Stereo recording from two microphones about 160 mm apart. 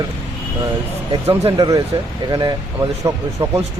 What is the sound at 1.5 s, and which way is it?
Speech, 25° right (ahead or behind).